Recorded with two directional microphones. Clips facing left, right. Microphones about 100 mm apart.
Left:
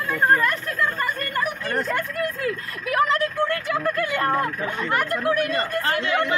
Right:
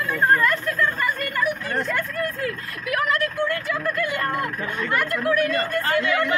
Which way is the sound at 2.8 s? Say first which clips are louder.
Left 2 dB; 30° left (ahead or behind).